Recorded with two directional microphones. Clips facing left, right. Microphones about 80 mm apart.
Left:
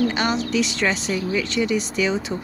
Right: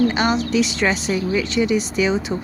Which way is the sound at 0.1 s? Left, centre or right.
Centre.